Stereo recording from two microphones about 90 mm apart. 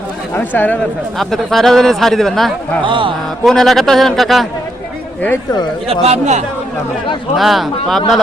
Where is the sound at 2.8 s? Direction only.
70° right (ahead or behind).